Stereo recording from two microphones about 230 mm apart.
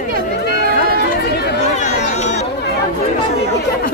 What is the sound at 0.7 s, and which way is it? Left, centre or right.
Run, left.